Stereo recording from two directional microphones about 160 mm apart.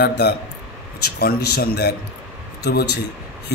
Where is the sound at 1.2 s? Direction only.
80° left.